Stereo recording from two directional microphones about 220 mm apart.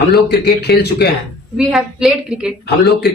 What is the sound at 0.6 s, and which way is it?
Speech, 45° left (ahead or behind).